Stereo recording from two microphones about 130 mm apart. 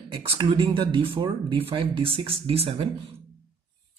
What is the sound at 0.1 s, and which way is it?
Speech, 35° right (ahead or behind).